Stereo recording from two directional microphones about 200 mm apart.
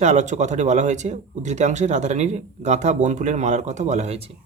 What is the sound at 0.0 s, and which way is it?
Speech, 35° right (ahead or behind).